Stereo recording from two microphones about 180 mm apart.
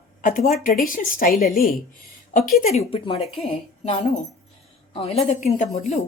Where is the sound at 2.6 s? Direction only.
35° left (ahead or behind).